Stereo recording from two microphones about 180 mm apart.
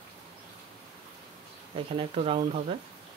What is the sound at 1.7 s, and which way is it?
Speech, 30° right (ahead or behind).